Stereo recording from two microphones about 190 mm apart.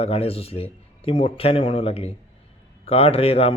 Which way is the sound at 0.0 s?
30° left (ahead or behind).